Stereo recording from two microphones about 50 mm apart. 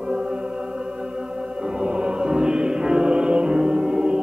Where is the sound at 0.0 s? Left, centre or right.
Centre.